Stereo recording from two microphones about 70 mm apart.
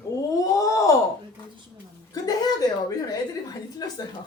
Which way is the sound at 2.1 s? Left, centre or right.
Left.